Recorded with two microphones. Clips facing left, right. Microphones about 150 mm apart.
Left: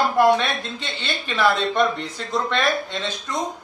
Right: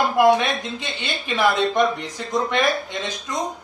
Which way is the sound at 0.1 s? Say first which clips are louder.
Right 1 dB; 15° right (ahead or behind).